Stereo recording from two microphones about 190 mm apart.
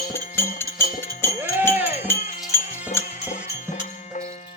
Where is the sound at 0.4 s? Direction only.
10° left (ahead or behind).